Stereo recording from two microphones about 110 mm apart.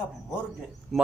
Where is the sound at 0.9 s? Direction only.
Centre (ahead or behind).